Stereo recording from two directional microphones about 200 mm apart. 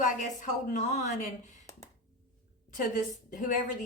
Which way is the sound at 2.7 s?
40° left (ahead or behind).